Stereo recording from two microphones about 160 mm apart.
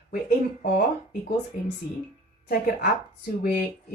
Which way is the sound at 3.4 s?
65° left (ahead or behind).